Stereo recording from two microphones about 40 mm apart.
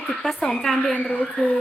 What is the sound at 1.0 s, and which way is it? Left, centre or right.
Speech, left.